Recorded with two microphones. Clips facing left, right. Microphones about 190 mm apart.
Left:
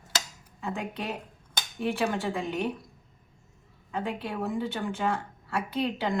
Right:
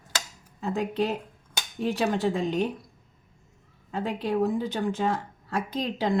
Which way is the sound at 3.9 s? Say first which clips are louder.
Right 5 dB; 35° right (ahead or behind).